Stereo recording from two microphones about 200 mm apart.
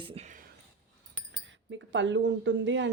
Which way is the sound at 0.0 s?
30° right (ahead or behind).